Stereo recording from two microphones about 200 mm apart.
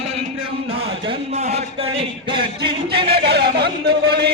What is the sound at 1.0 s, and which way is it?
Speech, 30° right (ahead or behind).